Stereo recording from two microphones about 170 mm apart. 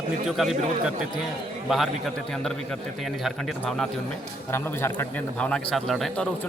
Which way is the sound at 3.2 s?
Centre (ahead or behind).